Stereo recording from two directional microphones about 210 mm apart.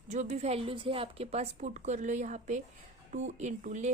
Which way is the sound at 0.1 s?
30° right (ahead or behind).